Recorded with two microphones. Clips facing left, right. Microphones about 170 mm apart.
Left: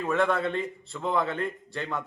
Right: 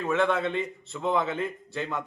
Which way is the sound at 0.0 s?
Centre (ahead or behind).